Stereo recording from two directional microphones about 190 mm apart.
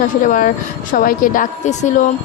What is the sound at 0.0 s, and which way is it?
A woman's voice, 45° left (ahead or behind).